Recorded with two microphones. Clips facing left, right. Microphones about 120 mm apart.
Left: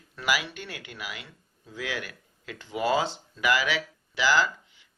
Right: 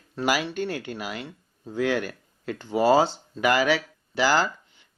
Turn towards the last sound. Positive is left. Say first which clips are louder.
# right 2 dB
turn(degrees=-45)  # may be behind; listen again after turning